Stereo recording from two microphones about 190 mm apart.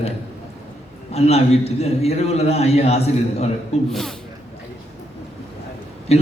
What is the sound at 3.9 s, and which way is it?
Speech, centre (ahead or behind).